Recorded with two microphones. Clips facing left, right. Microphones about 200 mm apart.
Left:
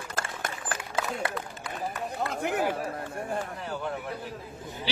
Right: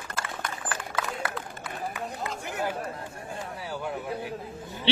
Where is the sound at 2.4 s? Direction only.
55° left (ahead or behind).